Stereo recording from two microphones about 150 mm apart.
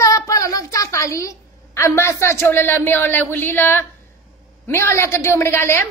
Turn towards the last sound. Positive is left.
turn(degrees=15)  # may be behind; listen again after turning